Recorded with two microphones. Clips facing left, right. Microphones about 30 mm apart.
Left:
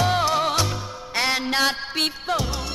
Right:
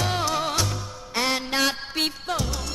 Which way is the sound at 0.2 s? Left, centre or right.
Centre.